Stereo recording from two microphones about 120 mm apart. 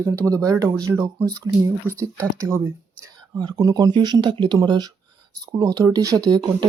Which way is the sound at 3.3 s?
35° right (ahead or behind).